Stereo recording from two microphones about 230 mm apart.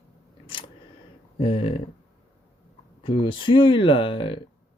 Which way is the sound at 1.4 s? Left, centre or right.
Left.